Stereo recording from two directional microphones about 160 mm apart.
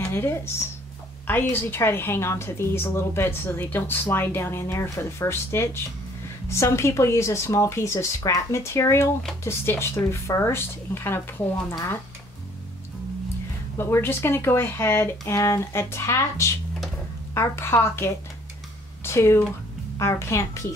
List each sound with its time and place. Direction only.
0.1 s a woman's voice: 15° left (ahead or behind)
13.7 s a woman's voice: 15° left (ahead or behind)